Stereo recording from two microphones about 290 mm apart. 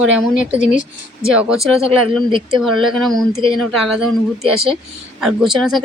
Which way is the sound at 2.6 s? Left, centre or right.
Centre.